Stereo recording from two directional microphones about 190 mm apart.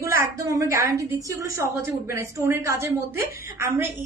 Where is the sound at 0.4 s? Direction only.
15° right (ahead or behind).